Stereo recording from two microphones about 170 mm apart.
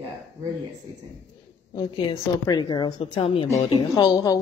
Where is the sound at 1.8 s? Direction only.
25° left (ahead or behind).